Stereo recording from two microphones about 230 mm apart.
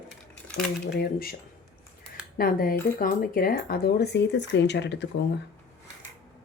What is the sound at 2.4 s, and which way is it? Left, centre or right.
Speech, left.